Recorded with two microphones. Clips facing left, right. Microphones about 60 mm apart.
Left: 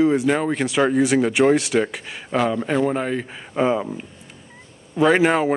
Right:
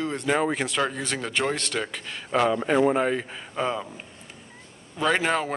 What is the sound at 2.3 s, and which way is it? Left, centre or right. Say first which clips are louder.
Speech: left 1 dB; centre.